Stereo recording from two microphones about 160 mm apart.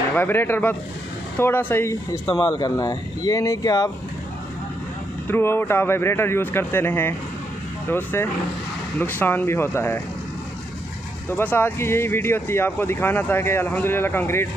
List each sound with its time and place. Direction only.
0.1 s speech: 10° left (ahead or behind)
5.3 s speech: 15° left (ahead or behind)
11.2 s speech: 15° left (ahead or behind)